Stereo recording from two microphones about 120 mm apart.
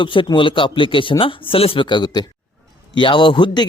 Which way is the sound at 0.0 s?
45° left (ahead or behind).